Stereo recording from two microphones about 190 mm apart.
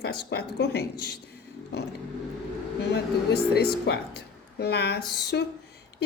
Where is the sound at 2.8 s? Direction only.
60° left (ahead or behind).